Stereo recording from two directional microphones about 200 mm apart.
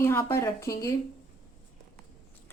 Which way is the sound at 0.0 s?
15° left (ahead or behind).